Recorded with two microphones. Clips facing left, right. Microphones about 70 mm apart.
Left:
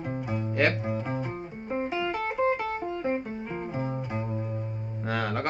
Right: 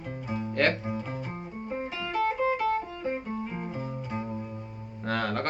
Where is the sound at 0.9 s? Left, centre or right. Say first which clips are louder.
Left 3 dB; left.